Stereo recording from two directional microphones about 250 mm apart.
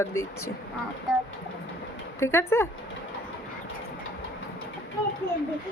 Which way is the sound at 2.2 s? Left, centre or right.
Centre.